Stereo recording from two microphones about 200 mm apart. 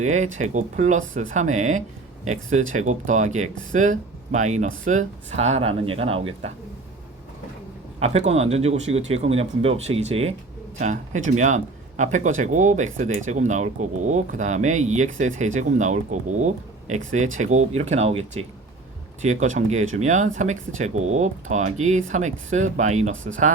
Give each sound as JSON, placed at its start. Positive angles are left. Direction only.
{"t": 0.0, "sound": "speech", "side_deg": -35}
{"t": 7.9, "sound": "speech", "side_deg": -30}